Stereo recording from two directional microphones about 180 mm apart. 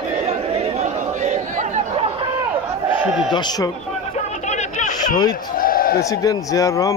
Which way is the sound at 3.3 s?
25° left (ahead or behind).